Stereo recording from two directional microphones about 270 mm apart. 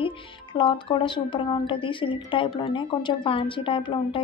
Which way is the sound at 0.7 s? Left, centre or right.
Centre.